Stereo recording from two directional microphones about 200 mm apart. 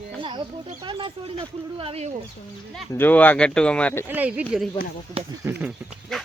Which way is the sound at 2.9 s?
10° left (ahead or behind).